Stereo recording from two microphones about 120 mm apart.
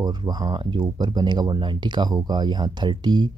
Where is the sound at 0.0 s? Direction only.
35° right (ahead or behind).